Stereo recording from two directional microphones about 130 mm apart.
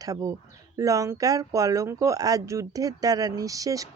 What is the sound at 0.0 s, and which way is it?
Speech, 25° right (ahead or behind).